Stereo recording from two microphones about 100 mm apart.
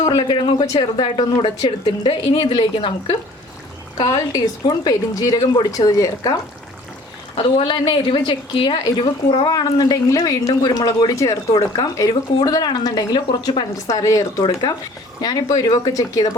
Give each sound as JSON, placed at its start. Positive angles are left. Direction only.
{"t": 0.0, "sound": "a woman's voice", "side_deg": 45}
{"t": 4.0, "sound": "a woman's voice", "side_deg": 40}
{"t": 7.3, "sound": "a woman's voice", "side_deg": 55}
{"t": 9.5, "sound": "a woman's voice", "side_deg": 40}